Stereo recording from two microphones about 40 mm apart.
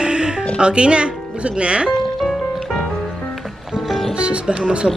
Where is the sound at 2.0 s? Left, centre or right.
Centre.